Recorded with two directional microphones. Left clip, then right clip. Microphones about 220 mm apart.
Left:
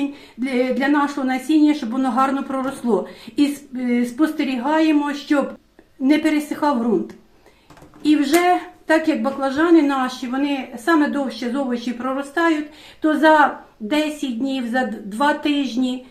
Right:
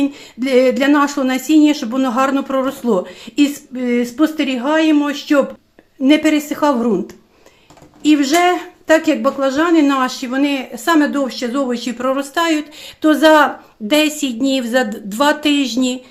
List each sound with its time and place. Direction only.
0.1 s speech: 50° right (ahead or behind)
8.0 s speech: 45° right (ahead or behind)